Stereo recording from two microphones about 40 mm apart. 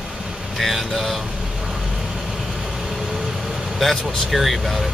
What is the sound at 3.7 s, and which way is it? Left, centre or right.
Speech, centre.